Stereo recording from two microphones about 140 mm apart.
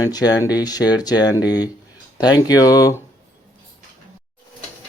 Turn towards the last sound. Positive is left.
turn(degrees=25)  # may be behind; listen again after turning